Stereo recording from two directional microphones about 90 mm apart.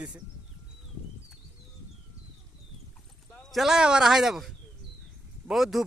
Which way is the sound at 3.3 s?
Centre (ahead or behind).